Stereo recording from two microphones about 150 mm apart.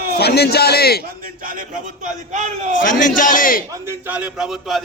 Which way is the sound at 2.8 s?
60° left (ahead or behind).